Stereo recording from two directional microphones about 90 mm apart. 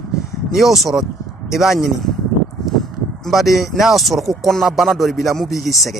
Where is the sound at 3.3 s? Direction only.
Centre (ahead or behind).